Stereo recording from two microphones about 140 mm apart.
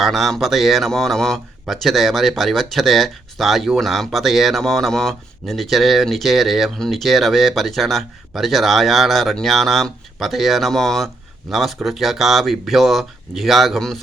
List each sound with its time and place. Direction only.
0.0 s speech: centre (ahead or behind)